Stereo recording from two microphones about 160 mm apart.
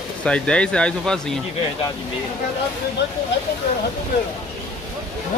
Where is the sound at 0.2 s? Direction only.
5° left (ahead or behind).